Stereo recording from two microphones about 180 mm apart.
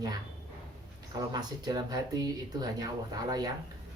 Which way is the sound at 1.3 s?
25° right (ahead or behind).